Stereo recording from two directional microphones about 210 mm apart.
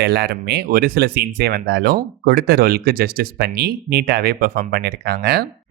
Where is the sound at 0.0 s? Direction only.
50° right (ahead or behind).